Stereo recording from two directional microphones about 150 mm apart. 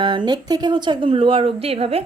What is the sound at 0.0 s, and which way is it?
Speech, 35° right (ahead or behind).